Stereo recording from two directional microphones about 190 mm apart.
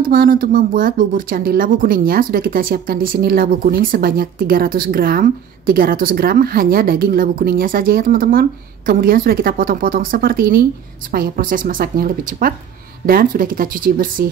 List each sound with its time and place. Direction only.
0.0 s speech: 50° right (ahead or behind)